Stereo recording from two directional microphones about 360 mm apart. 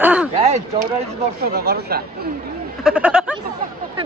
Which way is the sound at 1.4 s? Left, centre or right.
Right.